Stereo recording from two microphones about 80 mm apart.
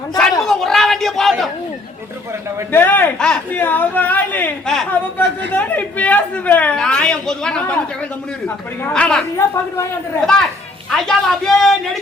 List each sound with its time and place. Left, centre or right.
0.2 s a sound: centre
2.7 s speech: left
3.2 s a man's voice: centre
3.5 s speech: left
4.6 s speech: centre
4.9 s a man's voice: left
8.9 s a man's voice: centre
10.2 s a man's voice: centre